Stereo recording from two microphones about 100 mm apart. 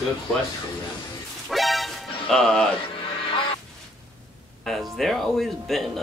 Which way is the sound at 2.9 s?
60° left (ahead or behind).